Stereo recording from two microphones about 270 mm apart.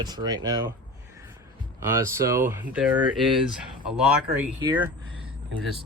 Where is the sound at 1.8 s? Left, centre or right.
Centre.